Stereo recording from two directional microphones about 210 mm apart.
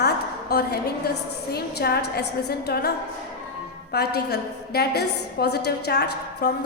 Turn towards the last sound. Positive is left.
turn(degrees=50)  # may be behind; listen again after turning